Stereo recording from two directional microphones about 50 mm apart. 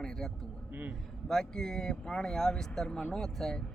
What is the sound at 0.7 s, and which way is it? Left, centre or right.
Speech, right.